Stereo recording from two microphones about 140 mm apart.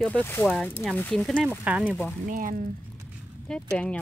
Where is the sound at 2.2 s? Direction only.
80° right.